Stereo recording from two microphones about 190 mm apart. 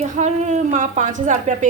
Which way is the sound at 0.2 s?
40° right (ahead or behind).